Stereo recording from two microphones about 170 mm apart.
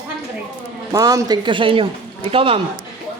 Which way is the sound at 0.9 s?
20° right (ahead or behind).